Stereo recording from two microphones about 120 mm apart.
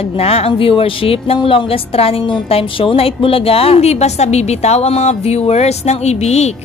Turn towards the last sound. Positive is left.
turn(degrees=65)  # may be behind; listen again after turning